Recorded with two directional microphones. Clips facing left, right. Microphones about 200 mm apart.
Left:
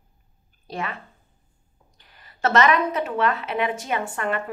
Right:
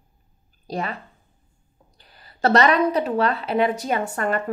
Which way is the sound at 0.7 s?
35° right (ahead or behind).